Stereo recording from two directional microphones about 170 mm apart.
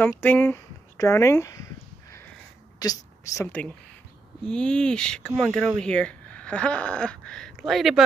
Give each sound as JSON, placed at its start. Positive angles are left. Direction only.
{"t": 0.0, "sound": "a sound", "side_deg": 10}
{"t": 2.8, "sound": "speech", "side_deg": 20}
{"t": 4.5, "sound": "speech", "side_deg": 5}